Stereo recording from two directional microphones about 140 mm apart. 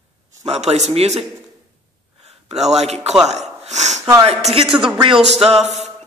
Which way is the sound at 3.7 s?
55° right (ahead or behind).